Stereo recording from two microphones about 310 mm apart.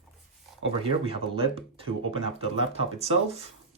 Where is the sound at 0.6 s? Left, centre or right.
Centre.